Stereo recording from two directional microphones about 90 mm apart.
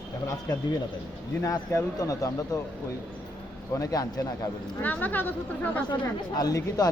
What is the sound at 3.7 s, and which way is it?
Speech, 40° left (ahead or behind).